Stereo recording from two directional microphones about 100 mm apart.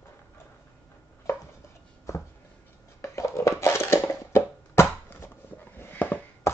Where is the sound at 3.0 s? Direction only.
25° left (ahead or behind).